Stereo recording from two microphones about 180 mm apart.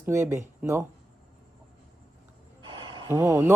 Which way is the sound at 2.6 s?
25° right (ahead or behind).